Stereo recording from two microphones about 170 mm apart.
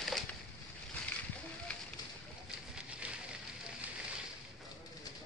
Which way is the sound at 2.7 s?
5° right (ahead or behind).